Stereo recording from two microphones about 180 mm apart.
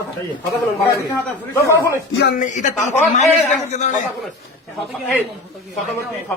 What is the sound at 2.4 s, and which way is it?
A man's voice, 45° left (ahead or behind).